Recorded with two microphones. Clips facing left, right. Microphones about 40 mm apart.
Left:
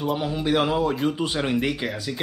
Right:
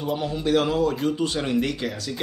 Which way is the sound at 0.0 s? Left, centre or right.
Centre.